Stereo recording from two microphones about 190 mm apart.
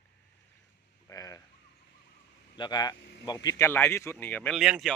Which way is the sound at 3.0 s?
70° left (ahead or behind).